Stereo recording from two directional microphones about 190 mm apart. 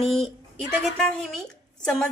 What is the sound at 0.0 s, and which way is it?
A woman's voice, centre (ahead or behind).